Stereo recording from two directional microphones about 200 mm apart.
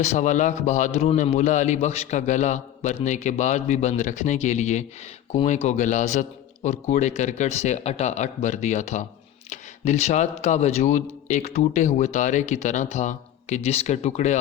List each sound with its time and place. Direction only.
0.0 s a man's voice: 35° left (ahead or behind)